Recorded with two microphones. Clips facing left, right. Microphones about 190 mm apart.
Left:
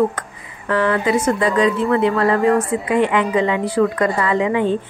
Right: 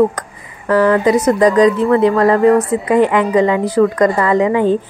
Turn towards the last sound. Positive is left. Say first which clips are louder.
# right 5 dB
turn(degrees=-40)  # may be behind; listen again after turning